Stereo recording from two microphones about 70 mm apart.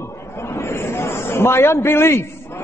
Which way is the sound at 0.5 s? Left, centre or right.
Left.